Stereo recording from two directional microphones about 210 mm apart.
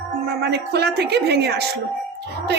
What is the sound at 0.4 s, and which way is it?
A woman's voice, 50° right (ahead or behind).